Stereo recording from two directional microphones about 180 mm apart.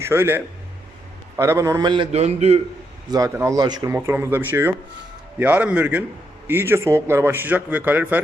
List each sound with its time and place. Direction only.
0.0 s a man's voice: 15° right (ahead or behind); by 2.6 s 35° right (ahead or behind)
3.1 s a man's voice: 20° right (ahead or behind)